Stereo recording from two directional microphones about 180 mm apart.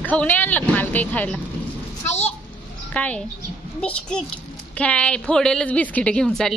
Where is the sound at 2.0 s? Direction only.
35° left (ahead or behind).